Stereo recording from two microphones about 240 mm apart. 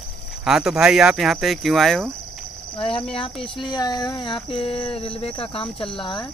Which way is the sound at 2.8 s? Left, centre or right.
Left.